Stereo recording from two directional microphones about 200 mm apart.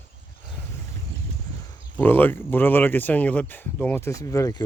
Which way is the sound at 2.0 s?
10° left (ahead or behind).